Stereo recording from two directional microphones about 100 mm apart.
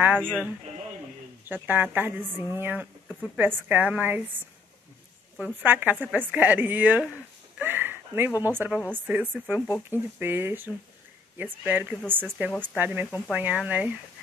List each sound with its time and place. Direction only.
0.2 s speech: 10° left (ahead or behind)
1.5 s a woman's voice: 20° right (ahead or behind)
5.6 s a woman's voice: 20° right (ahead or behind)
7.5 s a sound: 20° right (ahead or behind)
8.5 s a woman's voice: 20° right (ahead or behind)